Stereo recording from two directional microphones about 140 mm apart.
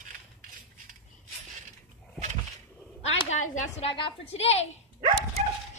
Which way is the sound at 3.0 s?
45° left (ahead or behind).